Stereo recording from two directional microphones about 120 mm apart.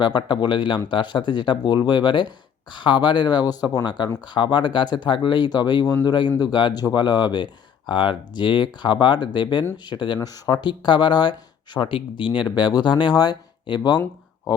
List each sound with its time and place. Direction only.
0.0 s speech: 40° left (ahead or behind)